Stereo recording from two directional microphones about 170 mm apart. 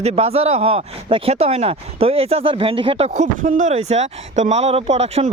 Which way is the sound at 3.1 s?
45° right (ahead or behind).